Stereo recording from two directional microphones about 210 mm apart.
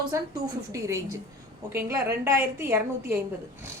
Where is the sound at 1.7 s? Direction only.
10° right (ahead or behind).